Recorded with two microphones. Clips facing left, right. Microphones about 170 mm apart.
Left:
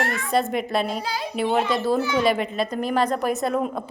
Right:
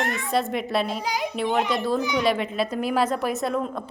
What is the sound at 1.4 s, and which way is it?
Speech, 15° right (ahead or behind).